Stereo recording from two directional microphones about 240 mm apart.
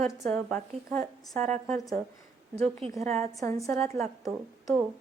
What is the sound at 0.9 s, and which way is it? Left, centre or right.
Speech, centre.